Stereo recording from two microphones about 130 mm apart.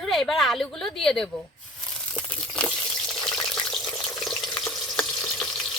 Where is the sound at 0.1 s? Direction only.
Centre (ahead or behind).